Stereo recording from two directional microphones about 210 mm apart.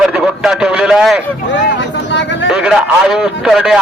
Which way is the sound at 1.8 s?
60° left (ahead or behind).